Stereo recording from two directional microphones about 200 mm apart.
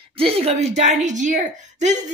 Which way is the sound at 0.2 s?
30° right (ahead or behind).